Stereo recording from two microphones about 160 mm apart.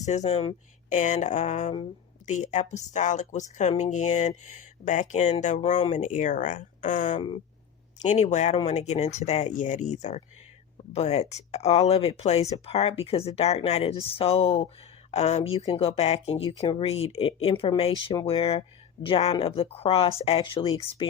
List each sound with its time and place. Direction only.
0.0 s speech: 45° left (ahead or behind)
7.2 s speech: 30° left (ahead or behind)
8.0 s speech: 45° left (ahead or behind)